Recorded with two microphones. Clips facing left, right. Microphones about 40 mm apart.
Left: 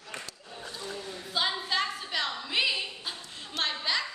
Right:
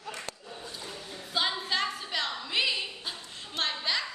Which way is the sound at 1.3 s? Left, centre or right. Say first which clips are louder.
Even; centre.